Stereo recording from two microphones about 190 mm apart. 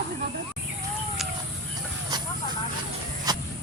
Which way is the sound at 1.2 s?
Centre (ahead or behind).